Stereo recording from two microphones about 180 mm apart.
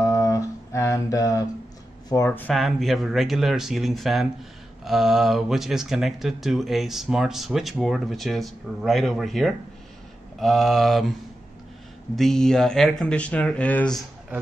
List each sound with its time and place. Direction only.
0.0 s mantra: 15° left (ahead or behind)
2.0 s speech: 15° left (ahead or behind)
2.5 s speech: centre (ahead or behind)
12.2 s speech: centre (ahead or behind)